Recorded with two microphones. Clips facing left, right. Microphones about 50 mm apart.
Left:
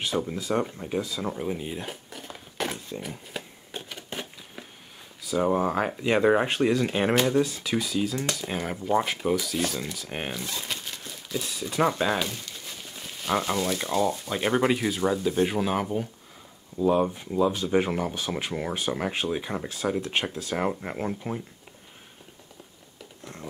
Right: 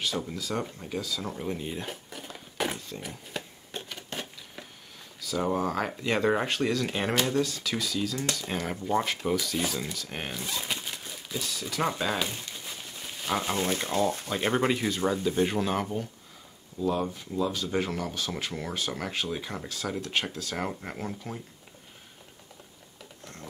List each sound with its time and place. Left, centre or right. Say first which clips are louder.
0.3 s speech: left 5 dB; left
1.3 s dishes: left 2 dB; centre
3.0 s a sound: left 2 dB; centre
5.2 s speech: left 4 dB; centre
8.5 s speech: left 4 dB; centre
9.9 s speech: left 3 dB; centre
10.3 s a sound: even; centre
11.8 s speech: left 5 dB; centre
12.3 s a sound: even; centre
13.6 s speech: left 2 dB; right
14.3 s speech: left 4 dB; centre
16.8 s speech: left 6 dB; left